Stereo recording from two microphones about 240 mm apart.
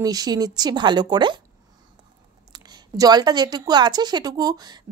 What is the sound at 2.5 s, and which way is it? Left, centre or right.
Speech, centre.